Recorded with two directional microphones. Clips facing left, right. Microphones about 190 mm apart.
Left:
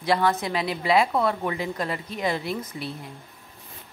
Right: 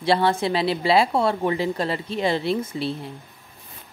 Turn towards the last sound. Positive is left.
turn(degrees=-30)  # may be behind; listen again after turning